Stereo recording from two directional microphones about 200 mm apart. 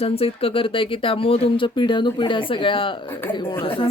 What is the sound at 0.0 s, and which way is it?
Speech, 30° left (ahead or behind).